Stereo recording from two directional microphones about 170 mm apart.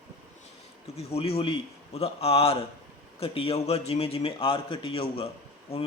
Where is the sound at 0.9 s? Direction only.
35° left (ahead or behind).